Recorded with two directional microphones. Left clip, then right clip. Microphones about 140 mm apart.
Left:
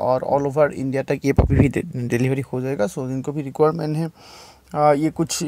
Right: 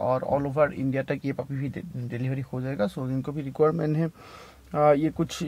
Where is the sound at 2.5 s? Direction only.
35° left (ahead or behind); by 3.7 s 20° left (ahead or behind).